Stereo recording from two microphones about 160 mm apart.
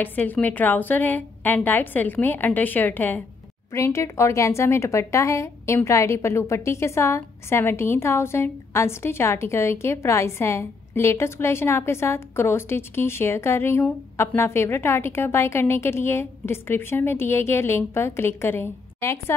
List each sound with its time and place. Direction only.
0.0 s a woman's voice: 10° left (ahead or behind)